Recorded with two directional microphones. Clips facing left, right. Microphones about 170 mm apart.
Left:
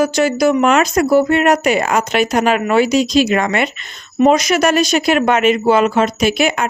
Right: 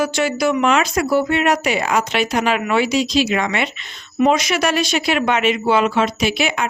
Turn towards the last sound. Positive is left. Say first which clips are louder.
# left 4 dB
turn(degrees=45)  # may be behind; listen again after turning